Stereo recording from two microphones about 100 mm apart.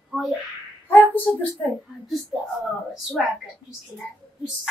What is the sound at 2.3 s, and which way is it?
Speech, centre (ahead or behind).